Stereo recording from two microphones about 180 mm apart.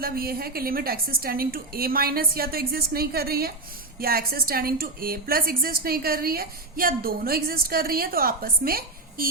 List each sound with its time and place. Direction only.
0.0 s a woman's voice: 55° right (ahead or behind)